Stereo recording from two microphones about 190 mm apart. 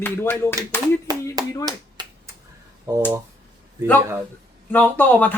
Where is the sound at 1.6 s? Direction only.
20° right (ahead or behind).